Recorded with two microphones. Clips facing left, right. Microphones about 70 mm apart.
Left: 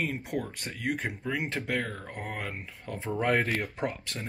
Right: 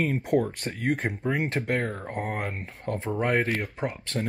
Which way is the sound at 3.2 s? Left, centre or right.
Right.